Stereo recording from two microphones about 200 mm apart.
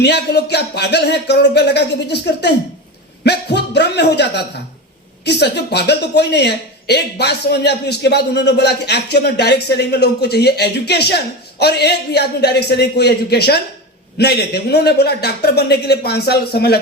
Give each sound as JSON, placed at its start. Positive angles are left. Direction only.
{"t": 0.0, "sound": "a woman's voice", "side_deg": 55}